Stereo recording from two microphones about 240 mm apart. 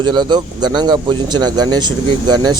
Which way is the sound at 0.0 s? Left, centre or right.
Centre.